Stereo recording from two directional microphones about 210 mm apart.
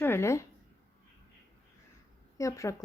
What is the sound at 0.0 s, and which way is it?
Speech, 10° left (ahead or behind).